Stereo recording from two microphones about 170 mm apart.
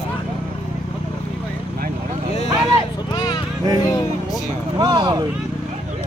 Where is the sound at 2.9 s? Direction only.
20° left (ahead or behind).